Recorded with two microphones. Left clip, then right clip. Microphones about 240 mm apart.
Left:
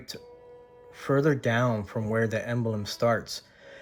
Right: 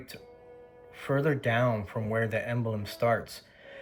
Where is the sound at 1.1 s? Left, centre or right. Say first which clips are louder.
Left 3 dB; left.